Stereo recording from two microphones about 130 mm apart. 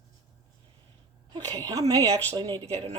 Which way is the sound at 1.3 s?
30° right (ahead or behind).